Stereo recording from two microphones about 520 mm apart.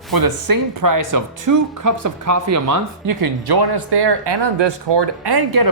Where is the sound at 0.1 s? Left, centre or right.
Right.